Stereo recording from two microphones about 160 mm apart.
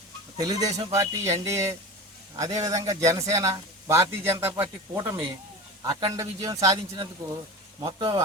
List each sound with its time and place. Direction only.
0.3 s speech: 25° right (ahead or behind)